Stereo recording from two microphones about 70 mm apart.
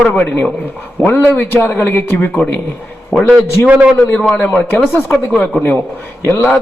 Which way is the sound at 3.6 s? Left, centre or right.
Centre.